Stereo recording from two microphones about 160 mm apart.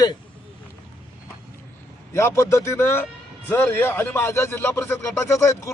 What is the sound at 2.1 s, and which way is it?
Speech, 15° left (ahead or behind).